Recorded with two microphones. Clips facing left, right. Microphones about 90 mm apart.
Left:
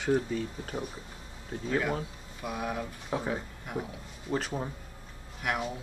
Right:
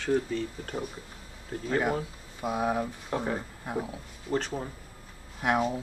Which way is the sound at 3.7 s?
30° right (ahead or behind).